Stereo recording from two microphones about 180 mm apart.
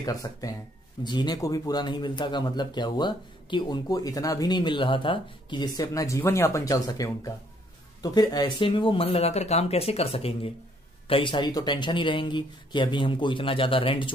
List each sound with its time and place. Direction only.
0.0 s speech: 20° left (ahead or behind)